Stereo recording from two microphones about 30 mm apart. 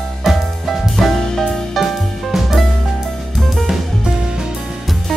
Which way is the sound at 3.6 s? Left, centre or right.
Centre.